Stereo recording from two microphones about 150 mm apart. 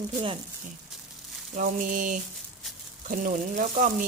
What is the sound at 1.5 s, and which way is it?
Speech, 60° right (ahead or behind).